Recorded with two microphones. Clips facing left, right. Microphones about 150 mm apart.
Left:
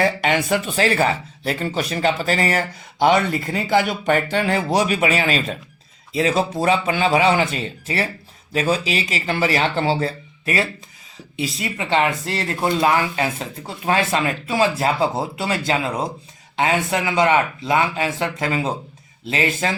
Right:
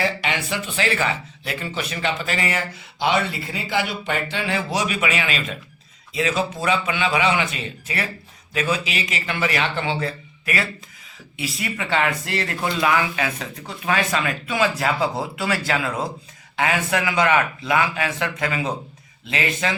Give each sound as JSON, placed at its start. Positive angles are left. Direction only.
{"t": 0.0, "sound": "speech", "side_deg": 45}